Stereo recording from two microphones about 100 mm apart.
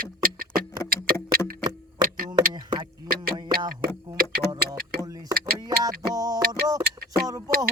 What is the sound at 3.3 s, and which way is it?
Music, 50° right (ahead or behind).